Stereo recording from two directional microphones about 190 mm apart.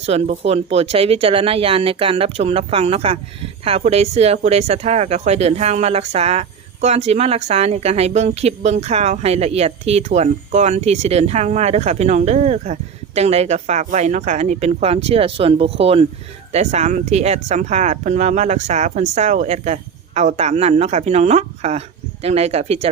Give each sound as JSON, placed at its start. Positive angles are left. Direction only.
{"t": 0.0, "sound": "speech", "side_deg": -35}